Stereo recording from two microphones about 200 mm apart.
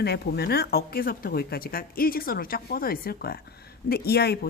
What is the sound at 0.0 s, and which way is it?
Speech, 55° left (ahead or behind).